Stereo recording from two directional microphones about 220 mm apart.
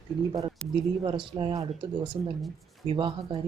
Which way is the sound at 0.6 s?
5° left (ahead or behind).